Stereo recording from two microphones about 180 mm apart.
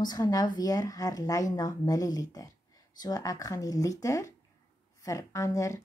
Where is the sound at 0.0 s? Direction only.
20° left (ahead or behind).